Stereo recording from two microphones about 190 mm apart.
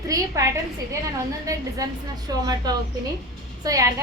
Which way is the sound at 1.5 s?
20° right (ahead or behind).